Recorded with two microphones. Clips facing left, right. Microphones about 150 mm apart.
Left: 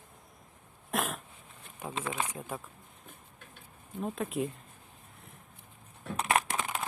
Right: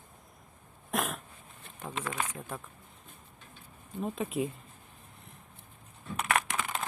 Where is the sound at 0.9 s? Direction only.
Centre (ahead or behind).